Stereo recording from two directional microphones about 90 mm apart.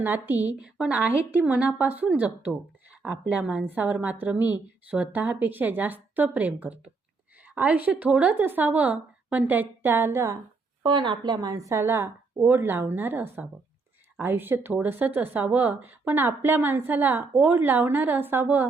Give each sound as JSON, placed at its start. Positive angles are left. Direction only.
{"t": 0.0, "sound": "speech", "side_deg": -25}
{"t": 0.6, "sound": "a woman's voice", "side_deg": -10}
{"t": 10.8, "sound": "a woman's voice", "side_deg": -60}
{"t": 11.7, "sound": "speech", "side_deg": -30}